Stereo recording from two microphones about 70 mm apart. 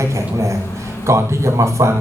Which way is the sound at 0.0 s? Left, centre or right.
Right.